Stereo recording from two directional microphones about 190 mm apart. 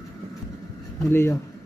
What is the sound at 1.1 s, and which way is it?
Speech, 10° left (ahead or behind).